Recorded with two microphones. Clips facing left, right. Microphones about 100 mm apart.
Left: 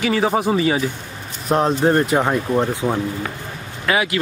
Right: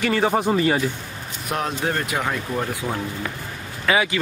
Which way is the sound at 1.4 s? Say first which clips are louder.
Left 8 dB; 30° left (ahead or behind).